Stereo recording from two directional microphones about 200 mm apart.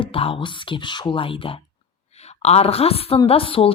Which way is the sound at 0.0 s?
25° left (ahead or behind).